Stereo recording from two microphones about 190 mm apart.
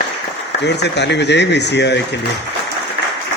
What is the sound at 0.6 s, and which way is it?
A man's voice, 65° left (ahead or behind).